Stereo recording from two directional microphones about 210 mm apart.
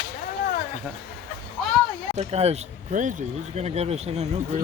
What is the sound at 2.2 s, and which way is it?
Speech, 30° right (ahead or behind).